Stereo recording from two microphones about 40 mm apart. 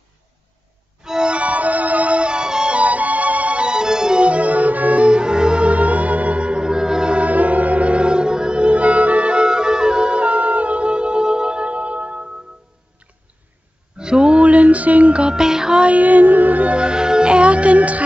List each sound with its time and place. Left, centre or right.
1.0 s violin: centre
1.3 s music: right
2.8 s music: right; by 4.2 s centre
4.2 s music: right; by 7.2 s centre
7.2 s music: right
13.9 s a sound: right
15.2 s music: centre
15.8 s music: right
16.7 s music: right